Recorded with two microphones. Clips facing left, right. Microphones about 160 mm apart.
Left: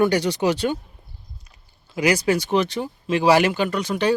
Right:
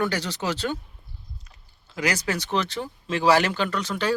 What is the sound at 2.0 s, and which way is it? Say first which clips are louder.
Speech: left 7 dB; 10° left (ahead or behind).